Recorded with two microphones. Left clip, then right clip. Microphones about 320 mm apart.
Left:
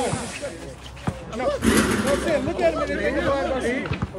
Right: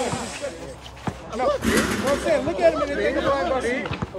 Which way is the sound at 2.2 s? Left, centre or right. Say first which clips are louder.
Right 2 dB; centre.